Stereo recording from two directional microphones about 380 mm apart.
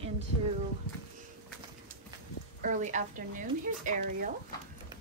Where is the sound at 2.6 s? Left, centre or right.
Centre.